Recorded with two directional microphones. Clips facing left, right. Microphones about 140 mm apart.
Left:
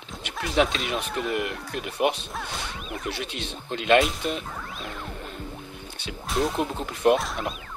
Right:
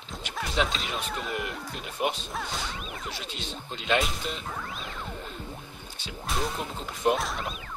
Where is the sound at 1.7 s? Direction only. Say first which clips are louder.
Left 6 dB; 65° left (ahead or behind).